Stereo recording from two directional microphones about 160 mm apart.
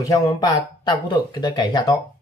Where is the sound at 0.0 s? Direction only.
20° left (ahead or behind).